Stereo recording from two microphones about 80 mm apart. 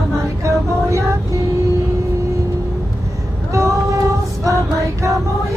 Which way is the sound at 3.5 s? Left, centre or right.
Right.